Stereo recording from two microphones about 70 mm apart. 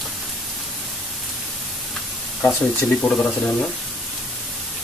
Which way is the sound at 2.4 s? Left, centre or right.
Centre.